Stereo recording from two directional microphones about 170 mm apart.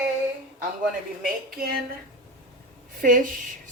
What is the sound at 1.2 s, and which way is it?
Speech, 60° right (ahead or behind).